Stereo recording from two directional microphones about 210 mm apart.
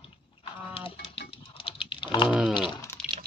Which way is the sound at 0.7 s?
25° left (ahead or behind).